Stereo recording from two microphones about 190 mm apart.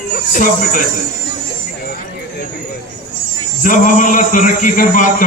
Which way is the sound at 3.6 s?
45° left (ahead or behind).